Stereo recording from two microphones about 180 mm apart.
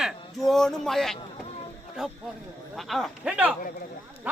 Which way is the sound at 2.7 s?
Centre (ahead or behind).